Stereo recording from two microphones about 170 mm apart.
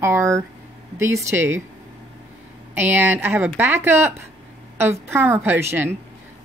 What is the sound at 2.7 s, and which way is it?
Speech, 10° right (ahead or behind).